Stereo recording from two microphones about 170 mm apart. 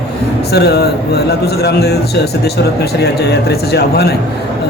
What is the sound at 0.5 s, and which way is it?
A man's voice, 70° left (ahead or behind).